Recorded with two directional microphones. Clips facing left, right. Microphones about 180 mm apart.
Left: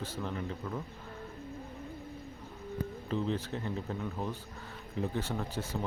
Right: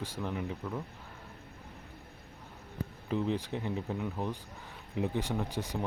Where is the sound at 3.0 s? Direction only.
15° right (ahead or behind).